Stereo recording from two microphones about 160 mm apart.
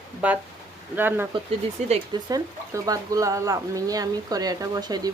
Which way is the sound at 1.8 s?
45° right (ahead or behind).